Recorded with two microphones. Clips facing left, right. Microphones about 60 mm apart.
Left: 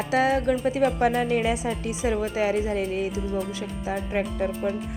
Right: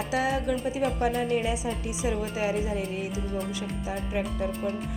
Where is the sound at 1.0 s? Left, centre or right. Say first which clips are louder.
Left 4 dB; left.